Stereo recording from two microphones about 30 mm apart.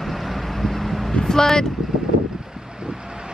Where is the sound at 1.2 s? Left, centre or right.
Centre.